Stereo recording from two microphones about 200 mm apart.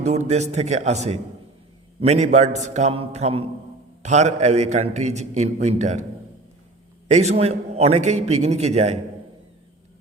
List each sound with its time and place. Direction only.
0.0 s a man's voice: 35° right (ahead or behind)
7.1 s a man's voice: 35° right (ahead or behind)